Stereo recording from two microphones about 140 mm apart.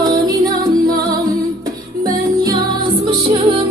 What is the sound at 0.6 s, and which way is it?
Music, 90° right.